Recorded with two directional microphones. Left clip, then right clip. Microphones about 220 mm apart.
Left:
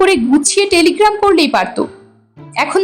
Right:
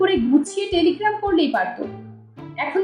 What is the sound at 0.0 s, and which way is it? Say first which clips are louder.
Speech: left 7 dB; 35° left (ahead or behind).